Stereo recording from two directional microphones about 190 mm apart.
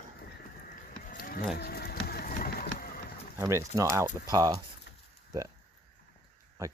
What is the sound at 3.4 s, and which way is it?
Speech, 15° right (ahead or behind).